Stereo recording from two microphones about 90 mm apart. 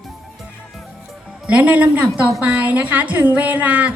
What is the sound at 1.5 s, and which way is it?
A woman's voice, 15° right (ahead or behind).